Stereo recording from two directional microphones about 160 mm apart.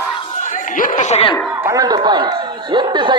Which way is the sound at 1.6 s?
20° right (ahead or behind).